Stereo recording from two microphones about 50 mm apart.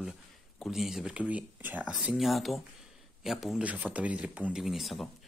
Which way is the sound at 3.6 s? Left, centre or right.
Right.